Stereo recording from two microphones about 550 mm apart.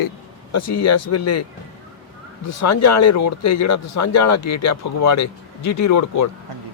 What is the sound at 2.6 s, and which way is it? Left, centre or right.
Speech, left.